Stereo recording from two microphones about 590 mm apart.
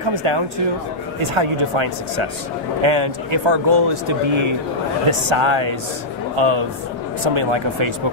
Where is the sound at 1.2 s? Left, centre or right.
Right.